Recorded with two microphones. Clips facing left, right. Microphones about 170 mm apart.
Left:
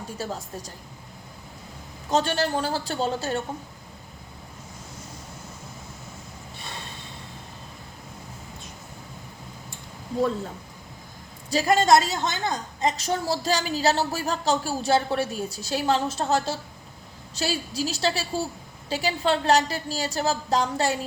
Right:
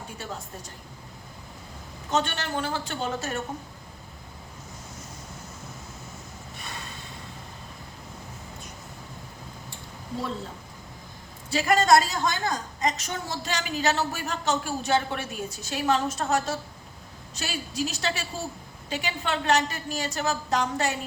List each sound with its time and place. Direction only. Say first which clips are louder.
2.0 s a woman's voice: left 4 dB; 35° left (ahead or behind)
11.5 s a woman's voice: left 1 dB; 30° left (ahead or behind)